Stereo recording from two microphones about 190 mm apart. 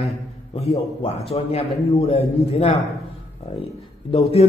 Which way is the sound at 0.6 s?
30° left (ahead or behind).